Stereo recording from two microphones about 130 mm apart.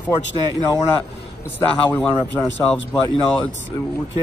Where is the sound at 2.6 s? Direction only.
5° left (ahead or behind).